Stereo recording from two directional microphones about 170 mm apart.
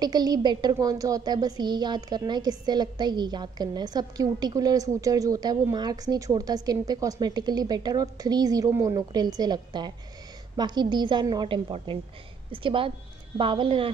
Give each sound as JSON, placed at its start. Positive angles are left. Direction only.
{"t": 0.0, "sound": "a woman's voice", "side_deg": -25}